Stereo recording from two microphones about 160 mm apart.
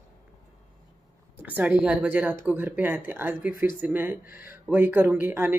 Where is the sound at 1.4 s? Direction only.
10° right (ahead or behind).